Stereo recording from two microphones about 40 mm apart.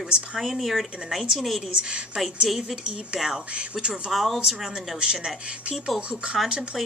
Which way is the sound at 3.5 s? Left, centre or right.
Right.